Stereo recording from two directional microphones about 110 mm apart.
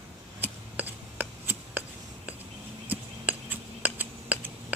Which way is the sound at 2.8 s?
15° right (ahead or behind).